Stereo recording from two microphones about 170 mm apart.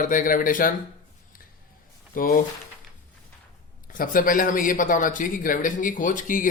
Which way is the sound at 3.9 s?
55° left (ahead or behind).